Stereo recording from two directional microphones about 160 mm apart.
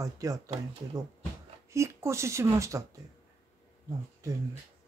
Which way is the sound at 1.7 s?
20° right (ahead or behind).